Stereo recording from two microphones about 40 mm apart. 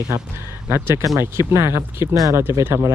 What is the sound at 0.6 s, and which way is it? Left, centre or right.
Speech, right.